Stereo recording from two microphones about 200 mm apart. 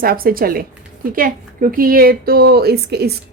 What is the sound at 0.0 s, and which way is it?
Speech, 45° right (ahead or behind).